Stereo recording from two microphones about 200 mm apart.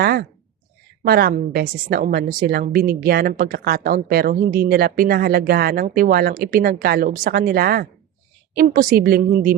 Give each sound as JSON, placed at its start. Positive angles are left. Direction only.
{"t": 0.0, "sound": "a woman's voice", "side_deg": -50}